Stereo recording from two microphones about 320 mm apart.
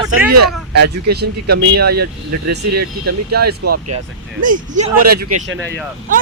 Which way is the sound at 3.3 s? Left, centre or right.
Right.